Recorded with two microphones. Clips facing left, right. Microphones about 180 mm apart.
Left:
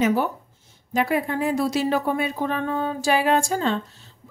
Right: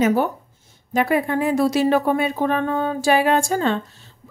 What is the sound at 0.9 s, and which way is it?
A woman's voice, 60° right (ahead or behind).